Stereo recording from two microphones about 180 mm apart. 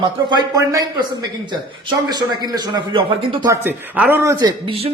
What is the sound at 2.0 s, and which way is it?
Speech, 25° right (ahead or behind).